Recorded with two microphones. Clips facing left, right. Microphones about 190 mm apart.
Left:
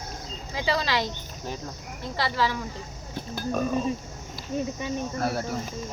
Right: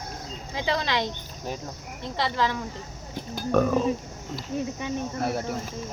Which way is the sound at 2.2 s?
5° left (ahead or behind).